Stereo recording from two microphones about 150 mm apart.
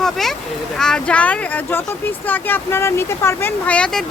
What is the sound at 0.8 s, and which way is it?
Speech, 5° left (ahead or behind).